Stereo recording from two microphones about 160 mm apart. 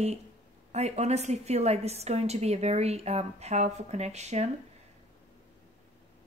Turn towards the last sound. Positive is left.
turn(degrees=-45)  # may be behind; listen again after turning